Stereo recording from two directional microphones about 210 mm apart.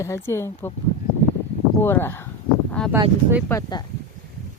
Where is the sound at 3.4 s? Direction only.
15° left (ahead or behind).